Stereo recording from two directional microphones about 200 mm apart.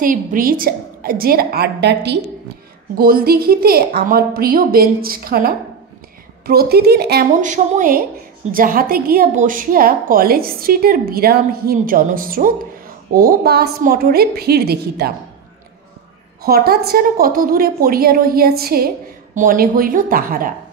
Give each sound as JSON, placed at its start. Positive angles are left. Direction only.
{"t": 0.0, "sound": "a woman's voice", "side_deg": -45}
{"t": 7.4, "sound": "a woman's voice", "side_deg": -40}
{"t": 16.4, "sound": "a woman's voice", "side_deg": -50}